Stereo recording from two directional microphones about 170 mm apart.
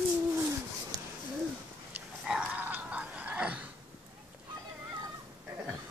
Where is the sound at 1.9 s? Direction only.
5° right (ahead or behind).